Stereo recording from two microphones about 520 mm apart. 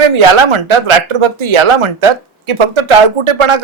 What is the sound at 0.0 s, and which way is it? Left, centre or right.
Speech, right.